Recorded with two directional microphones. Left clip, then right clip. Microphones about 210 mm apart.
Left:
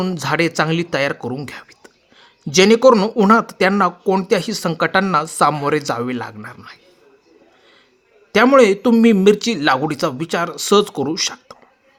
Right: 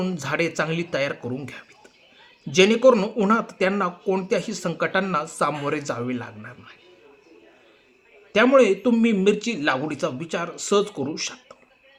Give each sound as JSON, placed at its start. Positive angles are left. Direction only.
{"t": 0.0, "sound": "speech", "side_deg": 40}
{"t": 8.3, "sound": "speech", "side_deg": 45}